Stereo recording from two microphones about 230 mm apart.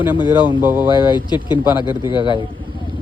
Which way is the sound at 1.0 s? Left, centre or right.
Centre.